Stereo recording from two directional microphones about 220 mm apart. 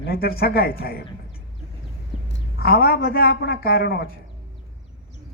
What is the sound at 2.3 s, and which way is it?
A man's voice, 45° left (ahead or behind).